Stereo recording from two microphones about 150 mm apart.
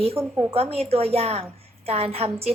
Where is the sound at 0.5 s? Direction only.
40° right (ahead or behind).